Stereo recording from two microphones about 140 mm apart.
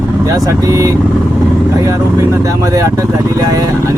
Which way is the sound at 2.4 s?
25° right (ahead or behind).